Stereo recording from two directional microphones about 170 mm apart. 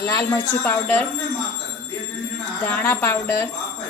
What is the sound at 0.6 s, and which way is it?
Speech, 10° left (ahead or behind).